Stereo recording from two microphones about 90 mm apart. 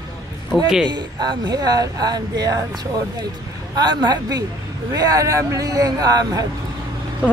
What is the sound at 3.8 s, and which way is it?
Speech, 50° right (ahead or behind).